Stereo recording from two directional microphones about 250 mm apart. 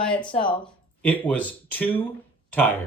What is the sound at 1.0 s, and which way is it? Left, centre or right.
Speech, centre.